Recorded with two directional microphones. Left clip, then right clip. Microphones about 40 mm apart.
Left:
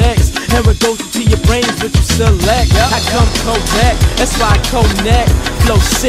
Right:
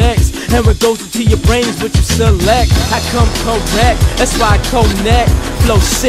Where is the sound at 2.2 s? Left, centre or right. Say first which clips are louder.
Right 3 dB; right.